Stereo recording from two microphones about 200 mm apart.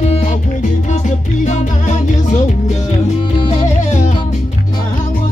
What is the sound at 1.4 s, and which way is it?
Music, 35° left (ahead or behind).